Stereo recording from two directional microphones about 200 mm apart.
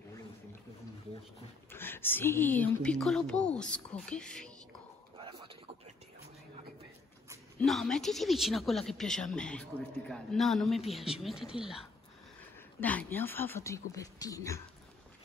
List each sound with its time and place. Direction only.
1.7 s speech: 10° left (ahead or behind)
5.1 s a sound: 25° right (ahead or behind)
7.6 s speech: centre (ahead or behind)
12.8 s speech: 10° left (ahead or behind)